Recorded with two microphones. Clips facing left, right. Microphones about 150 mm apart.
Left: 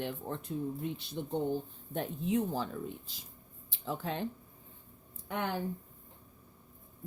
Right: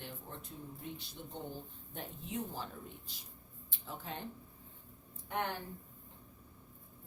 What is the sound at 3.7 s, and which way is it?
Speech, 90° left.